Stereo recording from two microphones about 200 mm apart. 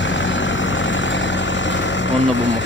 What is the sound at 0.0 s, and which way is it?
Vehicle, 65° left (ahead or behind).